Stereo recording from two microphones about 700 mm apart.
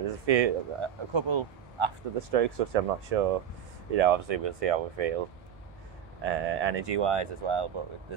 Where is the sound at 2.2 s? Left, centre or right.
Right.